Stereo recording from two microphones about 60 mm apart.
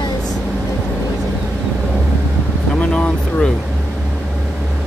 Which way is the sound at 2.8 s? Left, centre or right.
Centre.